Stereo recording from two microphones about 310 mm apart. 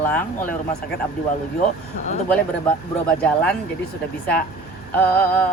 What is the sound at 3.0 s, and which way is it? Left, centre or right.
Speech, centre.